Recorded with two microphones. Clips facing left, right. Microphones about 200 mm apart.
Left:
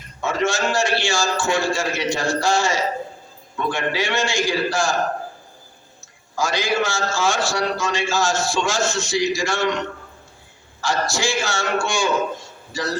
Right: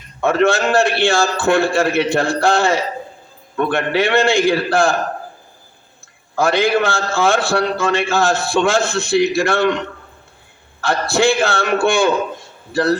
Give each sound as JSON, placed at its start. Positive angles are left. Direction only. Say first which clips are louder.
{"t": 0.2, "sound": "a man's voice", "louder": "right 7 dB", "side_deg": -60}
{"t": 6.3, "sound": "a man's voice", "louder": "right 7 dB", "side_deg": -60}
{"t": 10.8, "sound": "a man's voice", "louder": "right 6 dB", "side_deg": -60}